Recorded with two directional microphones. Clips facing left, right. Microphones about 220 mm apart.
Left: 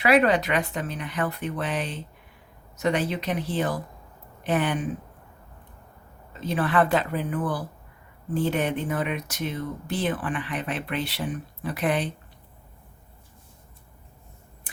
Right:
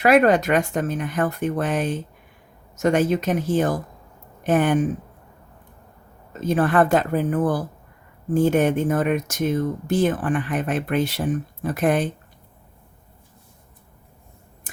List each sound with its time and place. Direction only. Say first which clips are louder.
0.0 s speech: right 4 dB; 45° right (ahead or behind)
6.3 s speech: right 5 dB; 45° right (ahead or behind)